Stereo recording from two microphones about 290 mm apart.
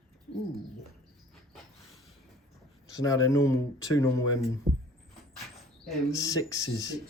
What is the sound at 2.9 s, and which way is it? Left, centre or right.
Speech, centre.